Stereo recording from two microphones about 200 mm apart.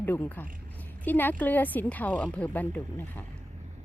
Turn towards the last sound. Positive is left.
turn(degrees=10)  # may be behind; listen again after turning